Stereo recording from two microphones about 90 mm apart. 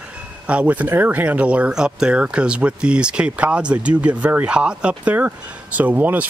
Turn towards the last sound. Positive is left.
turn(degrees=-20)  # may be behind; listen again after turning